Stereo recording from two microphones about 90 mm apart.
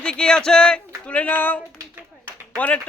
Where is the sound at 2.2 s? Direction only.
15° left (ahead or behind).